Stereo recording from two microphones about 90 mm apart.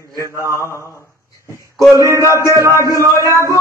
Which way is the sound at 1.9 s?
35° right (ahead or behind).